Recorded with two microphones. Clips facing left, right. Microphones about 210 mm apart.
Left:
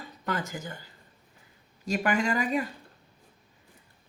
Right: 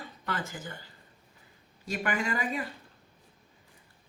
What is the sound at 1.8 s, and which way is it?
Speech, 40° left (ahead or behind).